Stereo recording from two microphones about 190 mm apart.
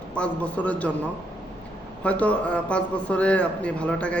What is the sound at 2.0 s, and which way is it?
A man's voice, 5° left (ahead or behind).